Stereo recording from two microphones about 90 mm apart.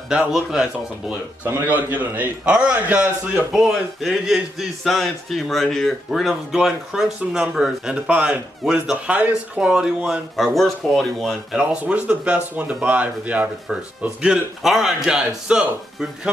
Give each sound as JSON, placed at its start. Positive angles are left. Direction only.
{"t": 0.1, "sound": "speech", "side_deg": -10}
{"t": 1.4, "sound": "a man's voice", "side_deg": -20}
{"t": 3.5, "sound": "speech", "side_deg": -5}
{"t": 11.7, "sound": "speech", "side_deg": -15}